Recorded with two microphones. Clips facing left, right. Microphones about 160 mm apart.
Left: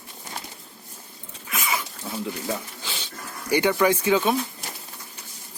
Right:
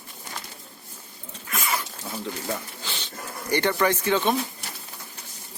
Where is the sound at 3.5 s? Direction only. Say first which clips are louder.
Left 3 dB; 10° left (ahead or behind).